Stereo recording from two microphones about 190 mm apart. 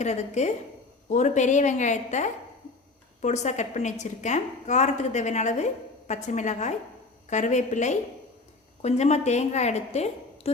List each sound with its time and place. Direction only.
0.0 s a woman's voice: 35° left (ahead or behind)